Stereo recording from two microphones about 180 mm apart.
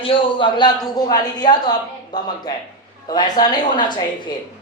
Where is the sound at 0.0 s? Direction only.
30° left (ahead or behind).